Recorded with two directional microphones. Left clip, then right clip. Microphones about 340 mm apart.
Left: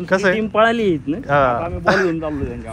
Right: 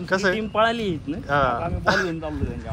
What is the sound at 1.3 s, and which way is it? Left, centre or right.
Speech, centre.